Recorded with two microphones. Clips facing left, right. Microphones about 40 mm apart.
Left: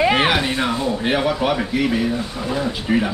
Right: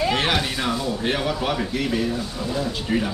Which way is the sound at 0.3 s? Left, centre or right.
Centre.